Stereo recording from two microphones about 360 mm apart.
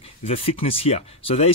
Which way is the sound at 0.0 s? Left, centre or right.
Centre.